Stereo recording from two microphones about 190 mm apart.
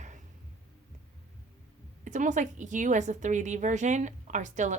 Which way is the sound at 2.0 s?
40° right (ahead or behind).